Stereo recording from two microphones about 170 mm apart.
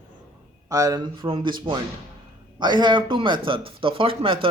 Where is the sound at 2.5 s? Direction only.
25° right (ahead or behind).